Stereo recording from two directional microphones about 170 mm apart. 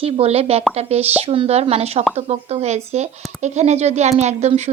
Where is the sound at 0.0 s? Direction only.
35° right (ahead or behind).